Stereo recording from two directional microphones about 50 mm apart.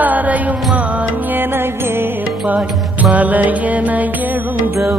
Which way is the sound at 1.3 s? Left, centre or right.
Right.